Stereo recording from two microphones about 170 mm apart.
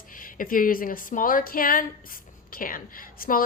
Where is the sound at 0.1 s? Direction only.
55° left (ahead or behind).